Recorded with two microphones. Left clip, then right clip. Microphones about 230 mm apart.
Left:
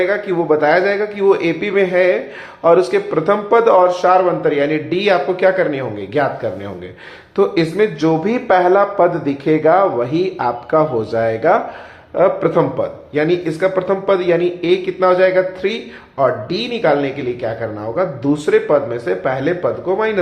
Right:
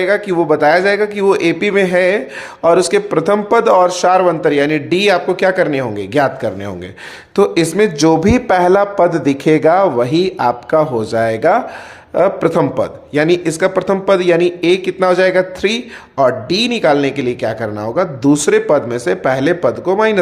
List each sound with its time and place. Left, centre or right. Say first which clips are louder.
0.0 s a man's voice: right 3 dB; right